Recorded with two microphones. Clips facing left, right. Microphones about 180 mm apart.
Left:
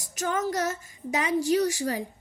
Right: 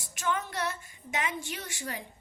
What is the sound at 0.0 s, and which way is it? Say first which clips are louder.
Speech: left 5 dB; 40° left (ahead or behind).